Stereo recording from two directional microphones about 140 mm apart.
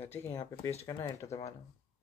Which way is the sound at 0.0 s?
15° left (ahead or behind).